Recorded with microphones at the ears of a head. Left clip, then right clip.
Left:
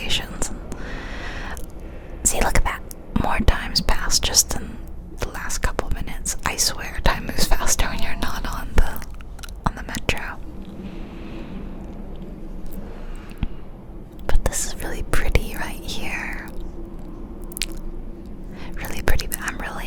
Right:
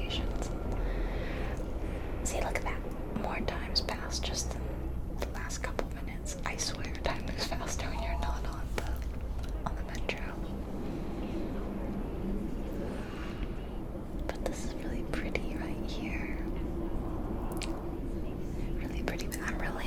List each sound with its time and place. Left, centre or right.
0.0 s whispering: left
2.2 s whispering: left
14.3 s whispering: left
18.8 s whispering: left